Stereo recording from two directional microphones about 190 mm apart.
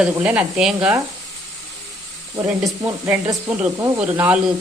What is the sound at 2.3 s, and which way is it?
Speech, 15° right (ahead or behind).